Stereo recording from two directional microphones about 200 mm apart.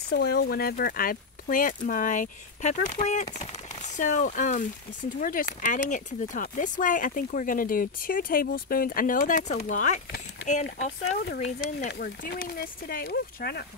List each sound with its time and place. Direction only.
0.1 s speech: 50° left (ahead or behind)